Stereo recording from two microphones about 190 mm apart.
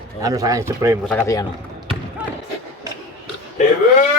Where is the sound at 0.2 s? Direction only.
20° right (ahead or behind).